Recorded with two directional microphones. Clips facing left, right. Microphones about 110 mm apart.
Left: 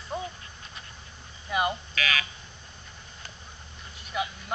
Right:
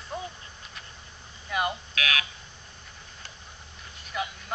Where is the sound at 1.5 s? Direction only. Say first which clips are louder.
Left 2 dB; 5° left (ahead or behind).